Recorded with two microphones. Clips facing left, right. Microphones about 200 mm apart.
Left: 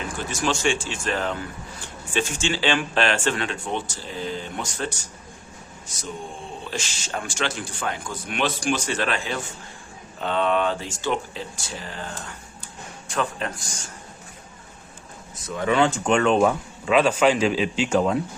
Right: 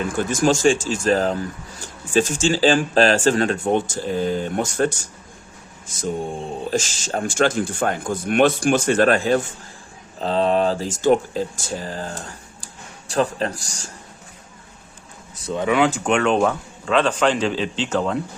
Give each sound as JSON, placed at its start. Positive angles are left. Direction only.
{"t": 0.2, "sound": "speech", "side_deg": -45}
{"t": 6.7, "sound": "speech", "side_deg": -45}
{"t": 10.2, "sound": "speech", "side_deg": -35}
{"t": 15.6, "sound": "speech", "side_deg": -10}
{"t": 16.0, "sound": "a man's voice", "side_deg": 0}